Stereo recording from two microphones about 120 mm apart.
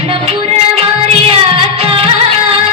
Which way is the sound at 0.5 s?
50° right (ahead or behind).